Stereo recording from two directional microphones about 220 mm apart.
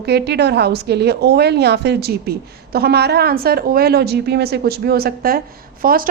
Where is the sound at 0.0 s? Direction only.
50° right (ahead or behind).